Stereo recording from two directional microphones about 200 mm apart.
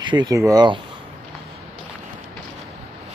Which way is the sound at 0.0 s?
20° right (ahead or behind).